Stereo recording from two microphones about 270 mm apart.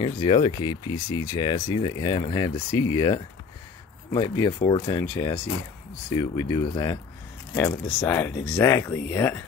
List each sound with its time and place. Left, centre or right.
0.0 s speech: centre